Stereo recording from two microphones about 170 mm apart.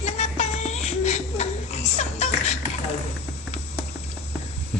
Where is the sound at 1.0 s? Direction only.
40° left (ahead or behind).